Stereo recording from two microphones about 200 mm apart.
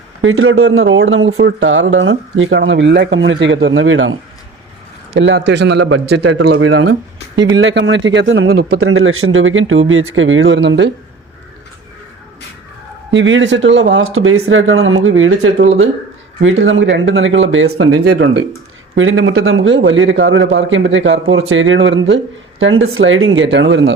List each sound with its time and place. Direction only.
0.2 s a man's voice: 90° right
5.1 s a man's voice: 60° right (ahead or behind)
6.7 s speech: 90° right
7.5 s a man's voice: 65° right (ahead or behind)
8.7 s a man's voice: 90° right; by 10.9 s 60° right (ahead or behind)
13.1 s a man's voice: 65° right (ahead or behind)
22.6 s a man's voice: 90° right; by 23.9 s 65° right (ahead or behind)